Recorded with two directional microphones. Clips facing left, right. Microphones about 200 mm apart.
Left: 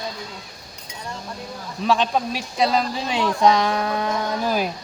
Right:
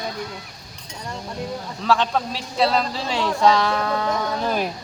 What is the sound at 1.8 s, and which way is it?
A man's voice, 15° left (ahead or behind).